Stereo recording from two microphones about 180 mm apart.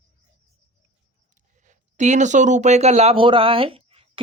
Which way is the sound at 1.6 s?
40° right (ahead or behind).